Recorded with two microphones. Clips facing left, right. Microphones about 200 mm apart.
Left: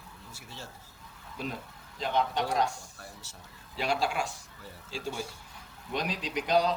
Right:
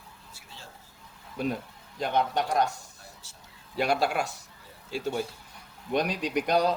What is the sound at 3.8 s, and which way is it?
Speech, 60° right (ahead or behind).